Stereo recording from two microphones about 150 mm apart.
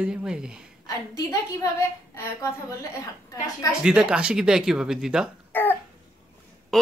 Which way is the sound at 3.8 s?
5° right (ahead or behind).